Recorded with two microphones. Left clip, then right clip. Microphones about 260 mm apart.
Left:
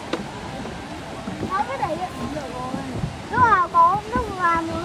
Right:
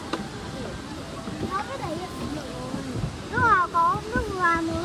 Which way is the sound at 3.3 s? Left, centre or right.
Left.